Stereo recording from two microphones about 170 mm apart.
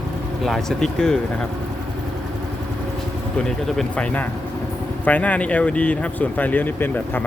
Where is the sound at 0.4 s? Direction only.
Centre (ahead or behind).